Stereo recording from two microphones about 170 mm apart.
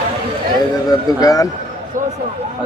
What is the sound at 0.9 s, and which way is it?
Speech, 20° left (ahead or behind).